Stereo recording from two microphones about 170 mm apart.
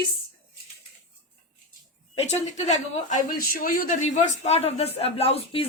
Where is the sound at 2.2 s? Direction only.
40° left (ahead or behind).